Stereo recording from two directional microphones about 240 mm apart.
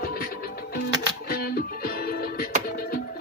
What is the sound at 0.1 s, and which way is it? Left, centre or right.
Music, left.